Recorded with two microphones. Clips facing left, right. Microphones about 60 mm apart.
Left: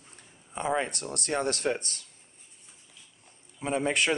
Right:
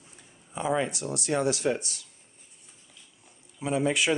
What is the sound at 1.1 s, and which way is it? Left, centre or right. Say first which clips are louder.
Speech: right 3 dB; left.